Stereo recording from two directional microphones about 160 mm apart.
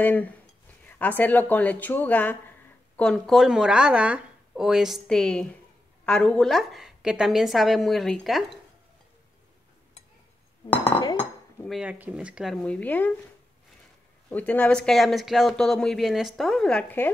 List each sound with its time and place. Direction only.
0.0 s speech: 10° left (ahead or behind)
10.8 s chink: 30° left (ahead or behind)
11.6 s speech: 5° right (ahead or behind)
12.6 s speech: 10° left (ahead or behind)
14.3 s speech: 10° left (ahead or behind)